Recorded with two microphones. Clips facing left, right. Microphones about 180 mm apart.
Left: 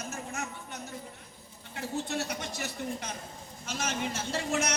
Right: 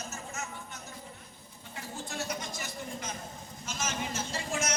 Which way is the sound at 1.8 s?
65° left (ahead or behind).